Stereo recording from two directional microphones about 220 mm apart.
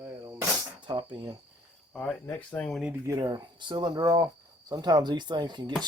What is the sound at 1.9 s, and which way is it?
Speech, 5° left (ahead or behind).